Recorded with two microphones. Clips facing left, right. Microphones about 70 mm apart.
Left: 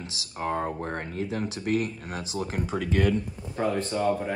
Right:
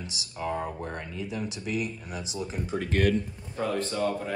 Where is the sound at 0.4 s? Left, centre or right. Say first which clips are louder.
Left 3 dB; left.